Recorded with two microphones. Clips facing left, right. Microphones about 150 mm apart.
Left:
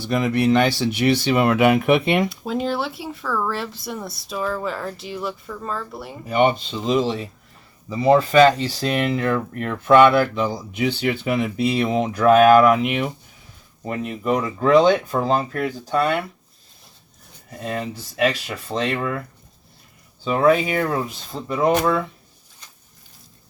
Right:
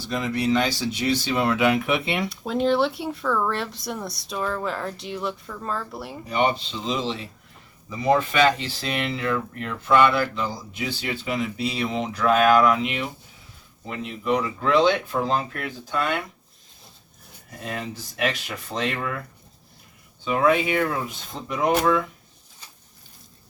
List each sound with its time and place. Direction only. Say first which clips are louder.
0.1 s speech: left 5 dB; 60° left (ahead or behind)
2.3 s speech: right 2 dB; centre (ahead or behind)
6.2 s speech: left 5 dB; 50° left (ahead or behind)
7.9 s speech: left 5 dB; 30° left (ahead or behind)
17.6 s speech: left 5 dB; 30° left (ahead or behind)
20.2 s speech: left 3 dB; 35° left (ahead or behind)